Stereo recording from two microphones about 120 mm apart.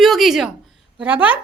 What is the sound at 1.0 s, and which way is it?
Speech, 15° right (ahead or behind).